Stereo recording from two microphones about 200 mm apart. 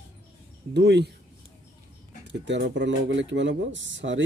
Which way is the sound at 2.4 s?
60° right (ahead or behind).